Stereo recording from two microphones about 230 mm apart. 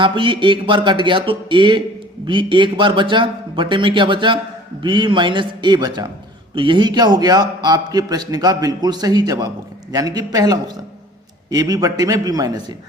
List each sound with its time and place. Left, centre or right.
0.0 s a man's voice: right